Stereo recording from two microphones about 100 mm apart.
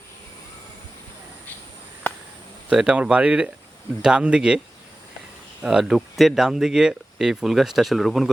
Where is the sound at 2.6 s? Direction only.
5° right (ahead or behind).